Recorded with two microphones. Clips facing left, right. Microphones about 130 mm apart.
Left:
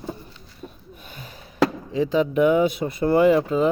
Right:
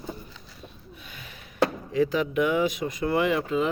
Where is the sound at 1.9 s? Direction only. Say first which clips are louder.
Left 3 dB; 25° left (ahead or behind).